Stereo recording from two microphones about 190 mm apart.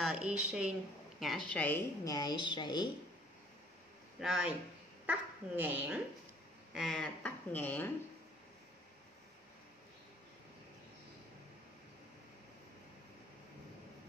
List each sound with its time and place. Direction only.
0.0 s a woman's voice: 5° right (ahead or behind)
2.0 s a woman's voice: 20° left (ahead or behind)
4.2 s a woman's voice: 5° right (ahead or behind)
6.7 s speech: centre (ahead or behind)